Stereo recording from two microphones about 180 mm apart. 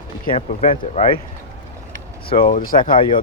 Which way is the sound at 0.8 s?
50° left (ahead or behind).